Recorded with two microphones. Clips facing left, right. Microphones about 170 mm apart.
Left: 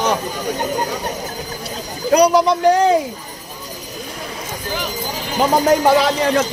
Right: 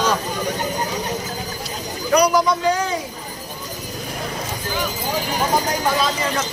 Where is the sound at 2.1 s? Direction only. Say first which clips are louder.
Left 4 dB; 30° left (ahead or behind).